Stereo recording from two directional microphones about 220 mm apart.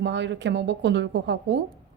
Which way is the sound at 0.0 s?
55° right (ahead or behind).